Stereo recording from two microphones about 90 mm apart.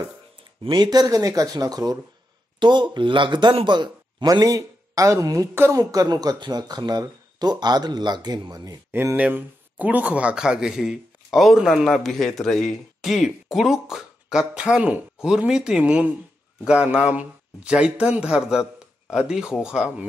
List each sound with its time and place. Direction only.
0.7 s speech: 50° right (ahead or behind)
2.6 s a man's voice: 55° right (ahead or behind)
9.1 s speech: 15° right (ahead or behind)